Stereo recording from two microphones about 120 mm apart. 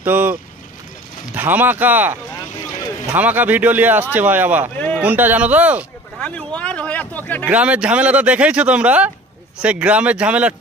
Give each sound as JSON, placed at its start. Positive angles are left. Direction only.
{"t": 0.0, "sound": "speech", "side_deg": -15}
{"t": 3.2, "sound": "speech", "side_deg": -15}
{"t": 6.1, "sound": "a sound", "side_deg": 10}
{"t": 7.4, "sound": "speech", "side_deg": -10}